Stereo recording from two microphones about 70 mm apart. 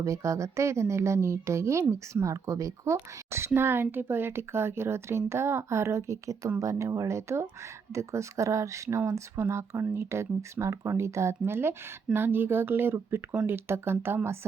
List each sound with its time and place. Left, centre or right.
0.0 s speech: right